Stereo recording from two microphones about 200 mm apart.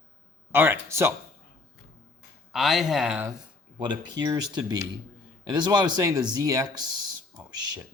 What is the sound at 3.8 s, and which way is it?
Speech, 20° right (ahead or behind).